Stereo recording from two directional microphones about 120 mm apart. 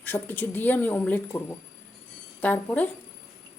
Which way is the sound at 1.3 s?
25° left (ahead or behind).